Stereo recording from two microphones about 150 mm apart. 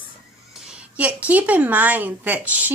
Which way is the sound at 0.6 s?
10° right (ahead or behind).